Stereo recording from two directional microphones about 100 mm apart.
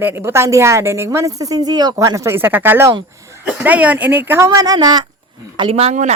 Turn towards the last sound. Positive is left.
turn(degrees=-90)